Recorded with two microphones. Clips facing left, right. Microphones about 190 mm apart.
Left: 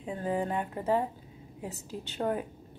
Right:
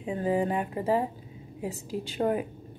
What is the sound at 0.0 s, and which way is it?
A woman's voice, 10° right (ahead or behind).